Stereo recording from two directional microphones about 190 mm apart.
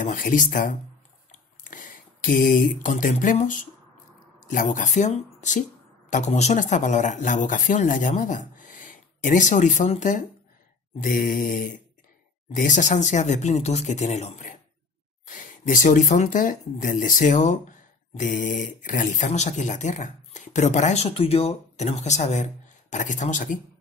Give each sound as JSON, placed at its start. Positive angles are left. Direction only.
{"t": 0.0, "sound": "mantra", "side_deg": 45}
{"t": 1.3, "sound": "a sound", "side_deg": 45}
{"t": 4.5, "sound": "speech", "side_deg": 45}
{"t": 11.0, "sound": "mantra", "side_deg": 45}
{"t": 12.5, "sound": "speech", "side_deg": 40}